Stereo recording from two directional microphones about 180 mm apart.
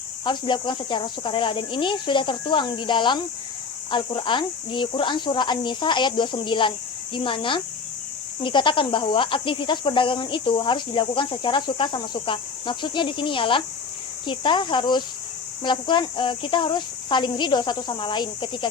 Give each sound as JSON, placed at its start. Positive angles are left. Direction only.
{"t": 0.3, "sound": "speech", "side_deg": 25}